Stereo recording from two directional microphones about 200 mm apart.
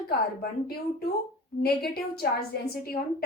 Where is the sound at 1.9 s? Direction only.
50° left (ahead or behind).